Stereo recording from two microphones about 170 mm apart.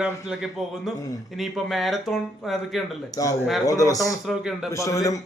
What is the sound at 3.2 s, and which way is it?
A man's voice, 20° left (ahead or behind).